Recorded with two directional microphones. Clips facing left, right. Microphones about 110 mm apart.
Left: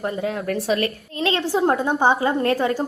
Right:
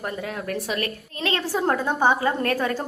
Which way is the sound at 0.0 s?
30° left (ahead or behind).